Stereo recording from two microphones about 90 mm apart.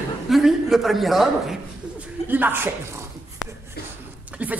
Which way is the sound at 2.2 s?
20° right (ahead or behind).